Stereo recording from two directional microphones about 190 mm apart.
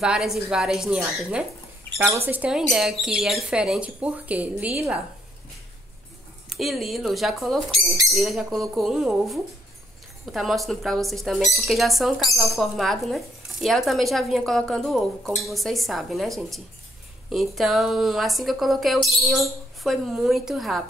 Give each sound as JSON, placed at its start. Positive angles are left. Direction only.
{"t": 0.0, "sound": "speech", "side_deg": -5}
{"t": 2.0, "sound": "speech", "side_deg": -15}
{"t": 6.5, "sound": "speech", "side_deg": 0}